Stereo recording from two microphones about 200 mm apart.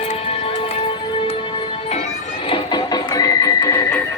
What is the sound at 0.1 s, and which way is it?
Music, 30° left (ahead or behind).